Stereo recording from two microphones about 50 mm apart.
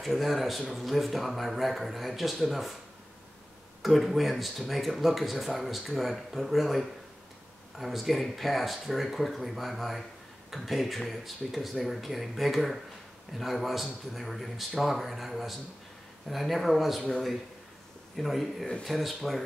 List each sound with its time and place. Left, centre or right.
0.0 s speech: centre
3.8 s speech: centre
18.1 s speech: centre